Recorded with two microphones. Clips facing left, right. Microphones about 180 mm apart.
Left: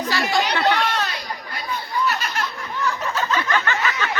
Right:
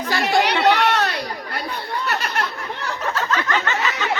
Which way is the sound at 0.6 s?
70° right (ahead or behind).